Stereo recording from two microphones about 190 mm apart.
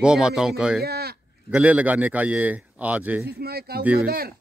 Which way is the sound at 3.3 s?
55° right (ahead or behind).